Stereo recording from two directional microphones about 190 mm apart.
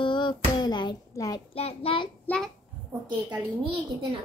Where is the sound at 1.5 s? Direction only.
30° left (ahead or behind).